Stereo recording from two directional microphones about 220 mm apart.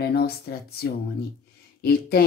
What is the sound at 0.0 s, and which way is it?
Speech, 45° left (ahead or behind).